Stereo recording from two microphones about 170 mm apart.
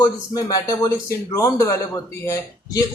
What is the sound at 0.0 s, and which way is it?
A man's voice, 20° left (ahead or behind).